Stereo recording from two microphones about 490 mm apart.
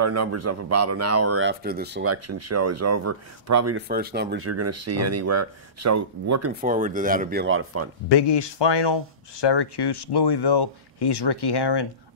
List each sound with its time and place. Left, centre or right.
0.0 s speech: right
3.7 s speech: centre
6.6 s speech: centre
8.1 s speech: left